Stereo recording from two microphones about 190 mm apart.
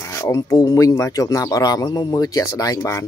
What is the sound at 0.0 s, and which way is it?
Speech, 15° left (ahead or behind).